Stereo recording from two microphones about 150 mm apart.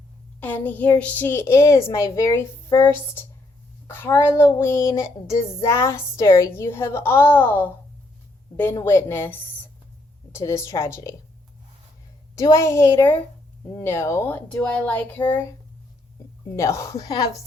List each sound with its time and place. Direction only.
0.3 s child singing: 10° left (ahead or behind)
8.8 s child singing: 15° left (ahead or behind)
10.3 s a woman's voice: 20° left (ahead or behind)
12.4 s child singing: 20° left (ahead or behind)
16.6 s a woman's voice: 20° left (ahead or behind)